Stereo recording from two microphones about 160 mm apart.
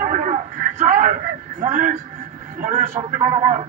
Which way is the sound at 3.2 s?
50° right (ahead or behind).